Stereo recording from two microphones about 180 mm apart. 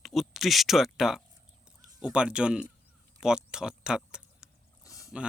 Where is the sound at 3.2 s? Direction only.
5° right (ahead or behind).